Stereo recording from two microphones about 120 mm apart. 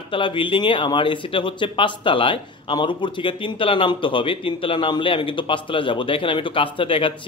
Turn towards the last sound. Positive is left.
turn(degrees=45)  # may be behind; listen again after turning